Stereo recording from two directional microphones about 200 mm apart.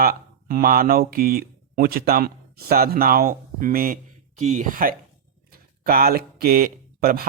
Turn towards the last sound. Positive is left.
turn(degrees=-50)  # may be behind; listen again after turning